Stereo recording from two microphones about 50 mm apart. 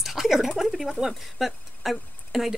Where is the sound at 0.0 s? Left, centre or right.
Centre.